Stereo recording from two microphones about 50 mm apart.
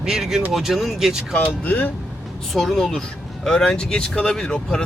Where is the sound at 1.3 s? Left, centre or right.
Left.